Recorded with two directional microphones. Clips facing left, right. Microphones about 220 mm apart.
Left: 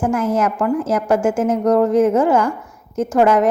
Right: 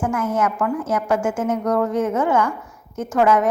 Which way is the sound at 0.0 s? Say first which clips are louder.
Left 4 dB; 35° left (ahead or behind).